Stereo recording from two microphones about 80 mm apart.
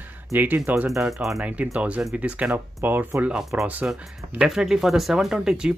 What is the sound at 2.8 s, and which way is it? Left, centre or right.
Speech, right.